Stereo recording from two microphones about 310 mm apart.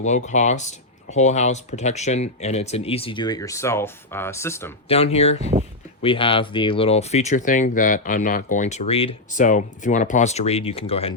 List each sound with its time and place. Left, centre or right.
0.0 s speech: left
4.9 s speech: centre